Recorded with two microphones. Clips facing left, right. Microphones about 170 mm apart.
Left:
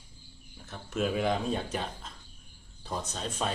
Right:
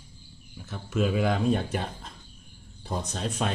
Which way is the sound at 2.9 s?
15° right (ahead or behind).